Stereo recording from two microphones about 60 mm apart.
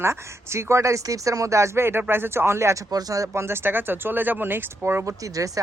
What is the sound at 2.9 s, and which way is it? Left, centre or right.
Speech, right.